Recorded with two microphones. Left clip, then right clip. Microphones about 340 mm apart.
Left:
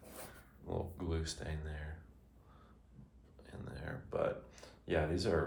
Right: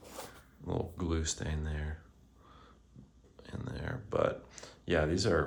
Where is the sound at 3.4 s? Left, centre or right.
Right.